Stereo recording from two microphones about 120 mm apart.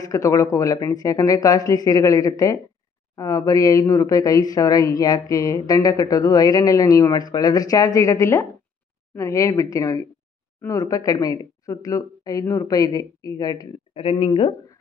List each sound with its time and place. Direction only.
0.0 s speech: 30° left (ahead or behind)
13.9 s speech: 50° left (ahead or behind)